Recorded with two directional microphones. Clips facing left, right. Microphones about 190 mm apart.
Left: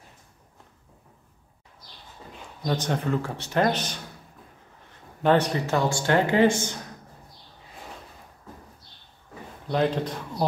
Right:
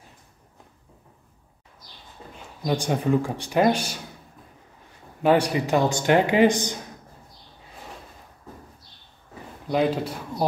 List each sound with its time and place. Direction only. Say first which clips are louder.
2.6 s speech: right 3 dB; 10° right (ahead or behind)
5.2 s speech: right 2 dB; 10° right (ahead or behind)
9.7 s speech: right 2 dB; 10° right (ahead or behind)